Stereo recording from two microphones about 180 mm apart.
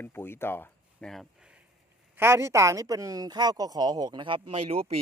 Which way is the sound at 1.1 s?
Centre (ahead or behind).